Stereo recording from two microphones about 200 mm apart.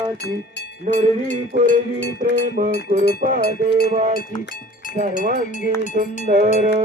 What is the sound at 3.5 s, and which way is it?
Music, 50° left (ahead or behind).